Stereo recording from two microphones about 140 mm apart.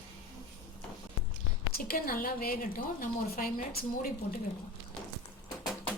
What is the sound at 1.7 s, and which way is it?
A woman's voice, 90° left.